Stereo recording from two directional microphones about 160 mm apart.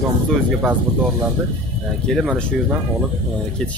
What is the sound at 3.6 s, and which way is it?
Speech, 5° left (ahead or behind).